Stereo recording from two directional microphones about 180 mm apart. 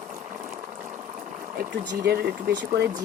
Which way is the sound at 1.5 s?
65° right (ahead or behind).